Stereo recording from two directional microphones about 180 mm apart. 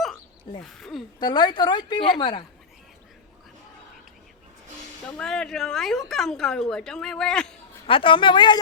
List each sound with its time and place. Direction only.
0.6 s a woman's voice: centre (ahead or behind)
1.2 s speech: 25° left (ahead or behind)
5.1 s a woman's voice: 5° left (ahead or behind)
7.9 s speech: 30° left (ahead or behind)